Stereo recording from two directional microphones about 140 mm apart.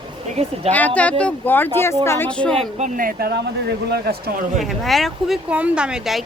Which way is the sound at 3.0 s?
85° right.